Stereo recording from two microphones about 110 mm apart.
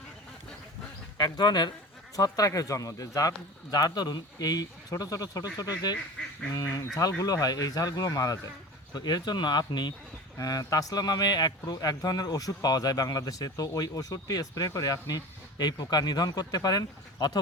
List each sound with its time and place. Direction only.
1.2 s a man's voice: 40° left (ahead or behind)